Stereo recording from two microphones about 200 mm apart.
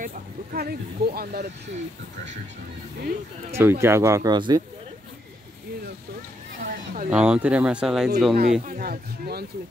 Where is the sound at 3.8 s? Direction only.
15° right (ahead or behind).